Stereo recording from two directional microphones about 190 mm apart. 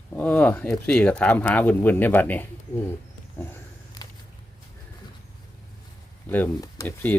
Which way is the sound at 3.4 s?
15° left (ahead or behind).